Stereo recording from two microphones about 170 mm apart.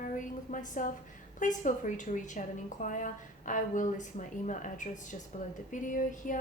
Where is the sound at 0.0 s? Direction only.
50° left (ahead or behind).